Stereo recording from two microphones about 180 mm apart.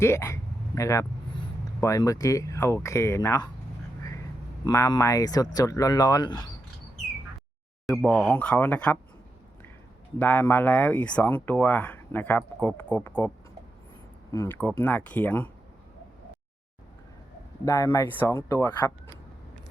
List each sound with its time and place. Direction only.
0.0 s speech: 15° left (ahead or behind)
4.6 s speech: 20° left (ahead or behind)
7.9 s speech: centre (ahead or behind)
10.2 s speech: 10° left (ahead or behind)
17.7 s speech: 15° left (ahead or behind)